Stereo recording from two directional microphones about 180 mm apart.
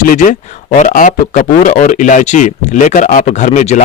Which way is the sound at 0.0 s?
50° left (ahead or behind).